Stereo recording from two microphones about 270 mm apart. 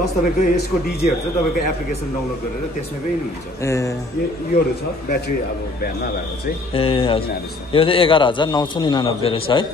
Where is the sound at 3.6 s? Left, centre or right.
Centre.